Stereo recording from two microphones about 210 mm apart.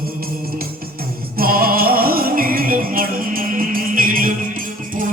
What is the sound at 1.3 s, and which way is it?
Music, 45° right (ahead or behind).